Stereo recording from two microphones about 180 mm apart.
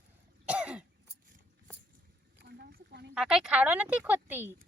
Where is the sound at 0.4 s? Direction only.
5° right (ahead or behind).